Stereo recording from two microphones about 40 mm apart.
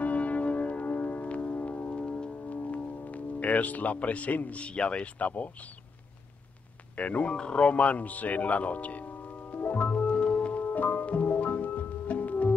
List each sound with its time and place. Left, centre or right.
0.0 s music: left
2.5 s speech: left
5.2 s speech: left
7.0 s speech: left
10.0 s music: left
10.5 s music: left